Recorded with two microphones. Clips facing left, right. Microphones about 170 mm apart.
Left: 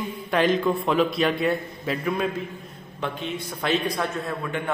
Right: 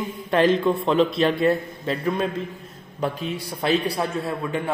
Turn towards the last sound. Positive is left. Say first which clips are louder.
# right 2 dB
turn(degrees=-10)  # may be behind; listen again after turning